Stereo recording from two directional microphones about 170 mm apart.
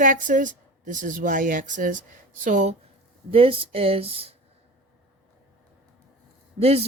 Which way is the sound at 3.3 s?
35° right (ahead or behind).